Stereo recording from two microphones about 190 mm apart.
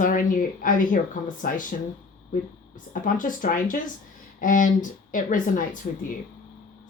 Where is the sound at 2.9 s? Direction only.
45° left (ahead or behind).